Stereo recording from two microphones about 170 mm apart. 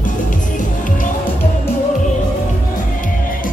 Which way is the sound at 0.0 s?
50° left (ahead or behind).